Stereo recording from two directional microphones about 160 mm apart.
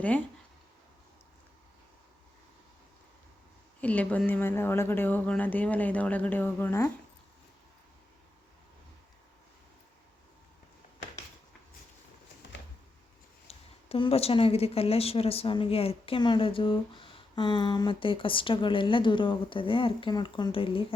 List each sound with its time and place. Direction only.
3.8 s speech: 10° left (ahead or behind)
13.5 s speech: 35° left (ahead or behind)